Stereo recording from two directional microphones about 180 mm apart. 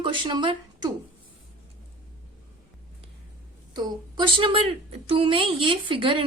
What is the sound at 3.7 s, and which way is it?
A woman's voice, 25° right (ahead or behind).